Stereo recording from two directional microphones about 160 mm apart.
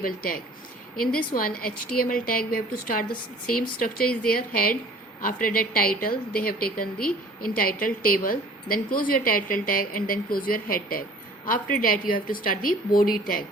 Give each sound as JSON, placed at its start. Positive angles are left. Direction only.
{"t": 0.0, "sound": "a woman's voice", "side_deg": 65}